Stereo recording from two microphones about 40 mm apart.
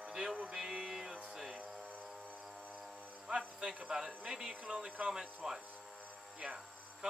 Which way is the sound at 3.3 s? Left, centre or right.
Right.